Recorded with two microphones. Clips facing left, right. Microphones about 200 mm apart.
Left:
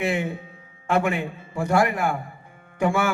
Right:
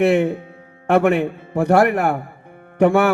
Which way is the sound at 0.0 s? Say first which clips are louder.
Right 9 dB; 65° right (ahead or behind).